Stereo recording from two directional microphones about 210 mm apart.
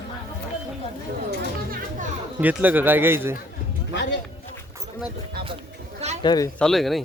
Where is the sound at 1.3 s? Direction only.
45° right (ahead or behind).